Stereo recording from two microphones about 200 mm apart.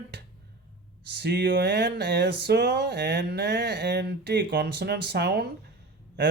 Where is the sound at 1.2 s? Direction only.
60° right (ahead or behind).